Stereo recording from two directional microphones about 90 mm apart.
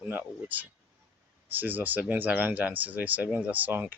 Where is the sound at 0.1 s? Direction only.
20° right (ahead or behind).